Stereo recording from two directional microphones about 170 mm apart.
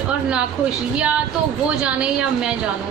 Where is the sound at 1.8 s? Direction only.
5° right (ahead or behind).